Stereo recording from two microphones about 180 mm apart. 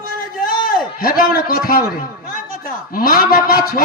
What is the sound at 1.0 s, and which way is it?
A man's voice, 55° left (ahead or behind).